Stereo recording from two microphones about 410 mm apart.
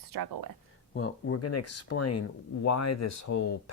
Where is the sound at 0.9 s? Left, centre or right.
Left.